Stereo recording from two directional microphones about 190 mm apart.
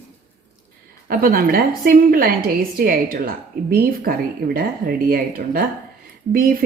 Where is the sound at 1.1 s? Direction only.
50° right (ahead or behind).